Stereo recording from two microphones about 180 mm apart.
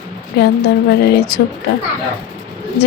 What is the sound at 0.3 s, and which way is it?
Speech, 65° left (ahead or behind).